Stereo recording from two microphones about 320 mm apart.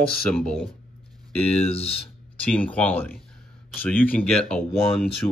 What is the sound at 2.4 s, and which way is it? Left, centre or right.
Speech, centre.